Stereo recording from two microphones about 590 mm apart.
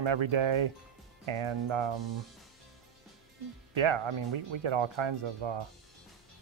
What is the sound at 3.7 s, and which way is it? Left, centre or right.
Speech, right.